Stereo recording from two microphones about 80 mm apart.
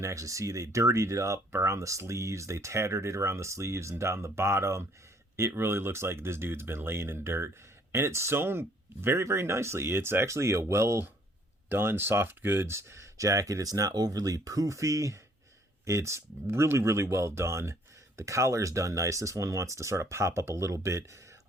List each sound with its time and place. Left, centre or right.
0.0 s speech: right